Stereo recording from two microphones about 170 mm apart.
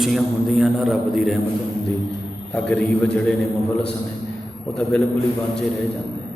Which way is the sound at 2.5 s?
10° left (ahead or behind).